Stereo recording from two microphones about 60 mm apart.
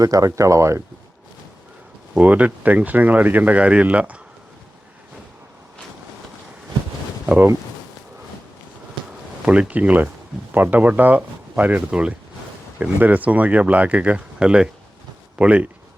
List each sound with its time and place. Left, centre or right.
0.0 s speech: right
2.1 s speech: right
9.5 s speech: right